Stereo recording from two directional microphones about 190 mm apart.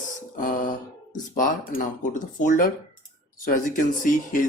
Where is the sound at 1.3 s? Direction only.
45° left (ahead or behind).